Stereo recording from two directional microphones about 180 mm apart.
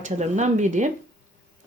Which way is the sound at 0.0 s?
40° right (ahead or behind).